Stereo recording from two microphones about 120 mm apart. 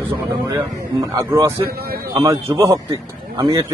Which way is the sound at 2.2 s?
30° right (ahead or behind).